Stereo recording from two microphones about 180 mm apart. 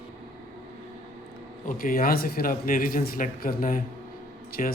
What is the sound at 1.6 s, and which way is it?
Speech, 50° left (ahead or behind).